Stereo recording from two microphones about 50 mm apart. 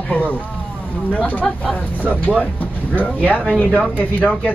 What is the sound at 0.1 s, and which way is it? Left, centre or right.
Speech, left.